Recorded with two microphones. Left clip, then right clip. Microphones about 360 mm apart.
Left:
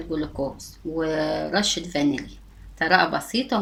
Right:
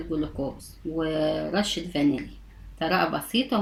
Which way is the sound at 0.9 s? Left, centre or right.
Left.